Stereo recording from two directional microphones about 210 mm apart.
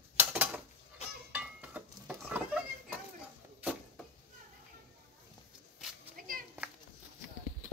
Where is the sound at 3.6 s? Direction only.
5° right (ahead or behind).